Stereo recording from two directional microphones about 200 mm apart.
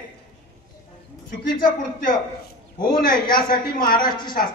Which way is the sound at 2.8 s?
45° left (ahead or behind).